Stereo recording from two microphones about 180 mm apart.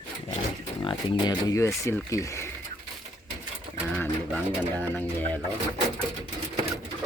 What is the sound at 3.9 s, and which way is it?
Speech, 10° left (ahead or behind).